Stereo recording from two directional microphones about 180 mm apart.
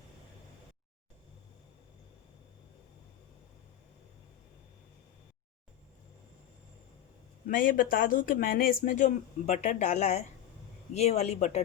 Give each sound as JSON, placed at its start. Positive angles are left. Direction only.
{"t": 7.4, "sound": "speech", "side_deg": 50}